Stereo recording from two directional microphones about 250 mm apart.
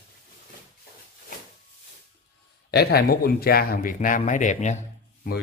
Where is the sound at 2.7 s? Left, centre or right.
Left.